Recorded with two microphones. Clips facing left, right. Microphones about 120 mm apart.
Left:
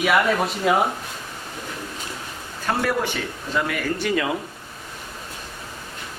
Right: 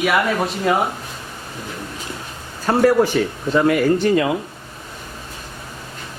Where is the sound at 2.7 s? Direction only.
40° right (ahead or behind).